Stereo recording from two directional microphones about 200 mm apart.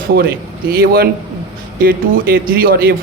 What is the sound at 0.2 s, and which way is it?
Speech, 50° right (ahead or behind).